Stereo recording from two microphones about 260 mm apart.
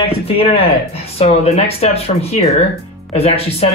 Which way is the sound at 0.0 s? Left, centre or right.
Left.